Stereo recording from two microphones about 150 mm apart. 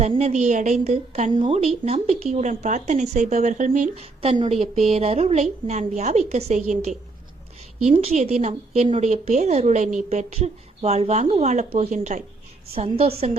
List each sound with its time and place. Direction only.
0.1 s a woman's voice: 50° right (ahead or behind)
4.2 s a woman's voice: 40° right (ahead or behind)
7.9 s a woman's voice: 50° right (ahead or behind)
12.7 s a woman's voice: 40° right (ahead or behind)